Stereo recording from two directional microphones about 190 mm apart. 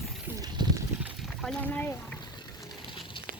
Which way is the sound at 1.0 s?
Centre (ahead or behind).